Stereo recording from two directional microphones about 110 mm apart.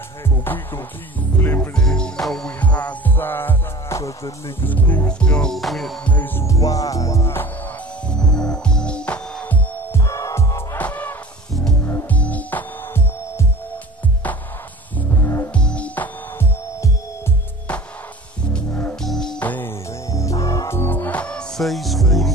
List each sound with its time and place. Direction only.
0.5 s music: 20° left (ahead or behind)
4.6 s music: 15° left (ahead or behind)
6.0 s music: 15° left (ahead or behind)
8.1 s music: 5° left (ahead or behind)
9.9 s music: 30° left (ahead or behind)
10.8 s music: 15° left (ahead or behind)
15.0 s music: 20° left (ahead or behind)
15.5 s music: 10° left (ahead or behind)
18.4 s music: 10° left (ahead or behind)
19.0 s music: 5° left (ahead or behind)
19.4 s music: 15° left (ahead or behind)
20.1 s music: 30° left (ahead or behind); by 22.3 s centre (ahead or behind)